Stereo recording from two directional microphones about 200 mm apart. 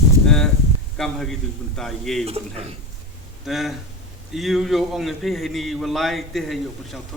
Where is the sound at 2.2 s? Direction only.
30° right (ahead or behind).